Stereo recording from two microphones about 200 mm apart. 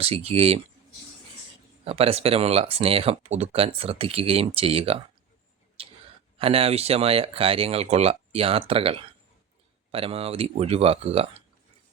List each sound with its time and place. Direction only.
0.0 s speech: 30° right (ahead or behind)
1.8 s speech: 30° right (ahead or behind)
5.8 s a sound: 30° right (ahead or behind)
6.4 s speech: 30° right (ahead or behind)